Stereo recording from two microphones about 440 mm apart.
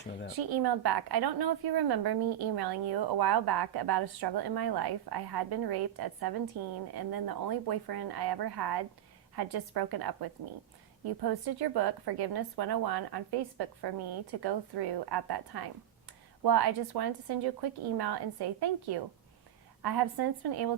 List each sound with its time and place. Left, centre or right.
0.5 s a woman's voice: right